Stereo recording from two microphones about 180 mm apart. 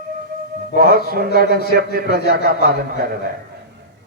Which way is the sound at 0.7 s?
55° right (ahead or behind).